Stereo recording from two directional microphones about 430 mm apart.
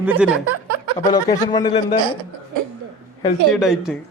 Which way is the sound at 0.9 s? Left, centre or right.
Centre.